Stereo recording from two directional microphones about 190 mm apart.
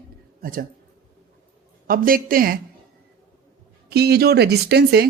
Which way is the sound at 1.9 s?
50° right (ahead or behind).